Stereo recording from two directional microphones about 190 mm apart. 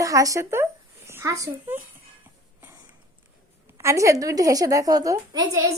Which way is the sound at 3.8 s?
15° right (ahead or behind).